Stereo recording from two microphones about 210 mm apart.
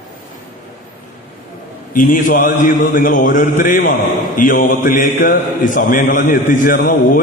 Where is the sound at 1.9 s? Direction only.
40° left (ahead or behind).